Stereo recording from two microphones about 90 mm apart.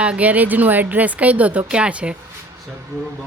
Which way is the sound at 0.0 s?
15° right (ahead or behind).